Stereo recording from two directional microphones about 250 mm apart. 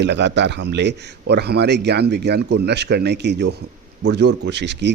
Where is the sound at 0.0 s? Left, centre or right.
Right.